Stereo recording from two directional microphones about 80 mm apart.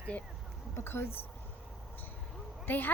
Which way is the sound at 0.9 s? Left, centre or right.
Left.